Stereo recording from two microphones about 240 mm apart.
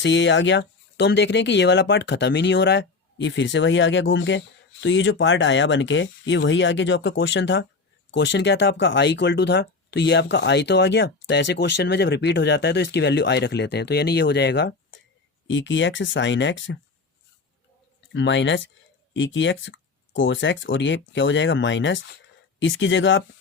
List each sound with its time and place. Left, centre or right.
0.0 s speech: left
18.1 s speech: left